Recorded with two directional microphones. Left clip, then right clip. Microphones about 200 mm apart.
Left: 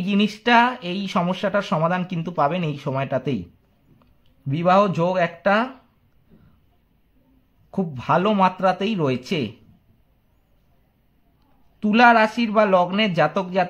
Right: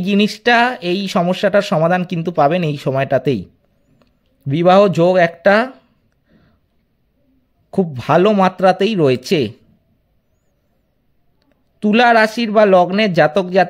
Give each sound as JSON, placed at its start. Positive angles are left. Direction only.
{"t": 0.0, "sound": "speech", "side_deg": -35}
{"t": 7.7, "sound": "speech", "side_deg": -40}
{"t": 11.8, "sound": "speech", "side_deg": -40}